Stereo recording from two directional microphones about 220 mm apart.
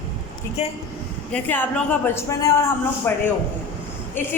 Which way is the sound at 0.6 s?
30° left (ahead or behind).